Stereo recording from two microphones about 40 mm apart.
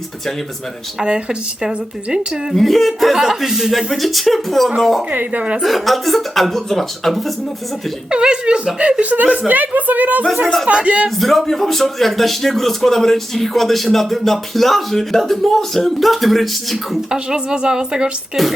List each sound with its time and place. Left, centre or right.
1.0 s speech: right
2.6 s a man's voice: centre
5.1 s speech: right
5.6 s a man's voice: centre
8.1 s a woman's voice: right
10.7 s speech: right
11.2 s a man's voice: centre
17.1 s speech: centre
18.4 s music: centre